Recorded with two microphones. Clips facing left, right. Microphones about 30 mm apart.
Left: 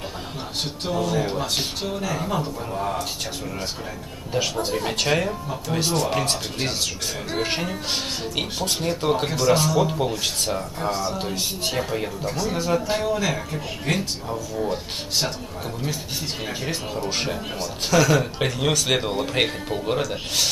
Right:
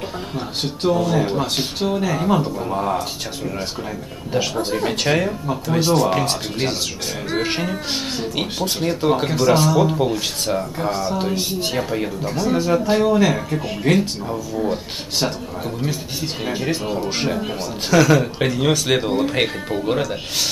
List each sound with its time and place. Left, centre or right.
0.8 s speech: centre
2.0 s speech: centre
3.0 s speech: centre
4.6 s speech: centre
16.4 s speech: centre